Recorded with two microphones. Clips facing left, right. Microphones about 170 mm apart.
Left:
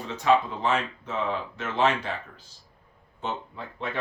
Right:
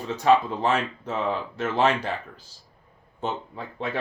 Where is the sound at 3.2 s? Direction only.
40° right (ahead or behind).